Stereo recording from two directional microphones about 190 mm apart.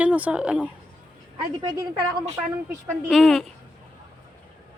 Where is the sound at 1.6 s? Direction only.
20° right (ahead or behind).